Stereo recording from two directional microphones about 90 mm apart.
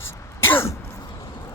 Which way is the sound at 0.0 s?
30° left (ahead or behind).